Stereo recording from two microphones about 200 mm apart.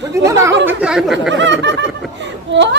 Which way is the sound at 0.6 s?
5° right (ahead or behind).